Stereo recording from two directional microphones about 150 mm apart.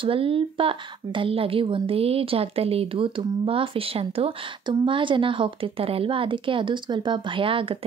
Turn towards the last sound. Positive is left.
turn(degrees=-35)  # may be behind; listen again after turning